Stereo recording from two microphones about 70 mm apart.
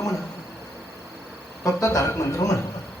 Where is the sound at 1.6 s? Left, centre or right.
Left.